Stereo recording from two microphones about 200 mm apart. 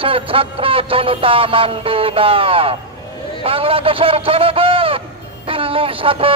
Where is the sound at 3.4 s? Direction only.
25° right (ahead or behind).